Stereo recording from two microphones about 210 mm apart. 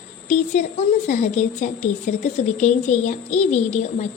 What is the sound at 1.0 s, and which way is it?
A child's voice, 35° left (ahead or behind).